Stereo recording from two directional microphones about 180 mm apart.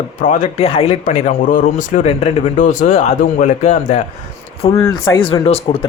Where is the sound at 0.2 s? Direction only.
40° left (ahead or behind).